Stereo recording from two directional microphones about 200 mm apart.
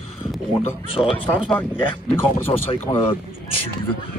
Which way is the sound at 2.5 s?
25° left (ahead or behind).